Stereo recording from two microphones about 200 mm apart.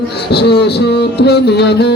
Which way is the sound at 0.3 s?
55° left (ahead or behind).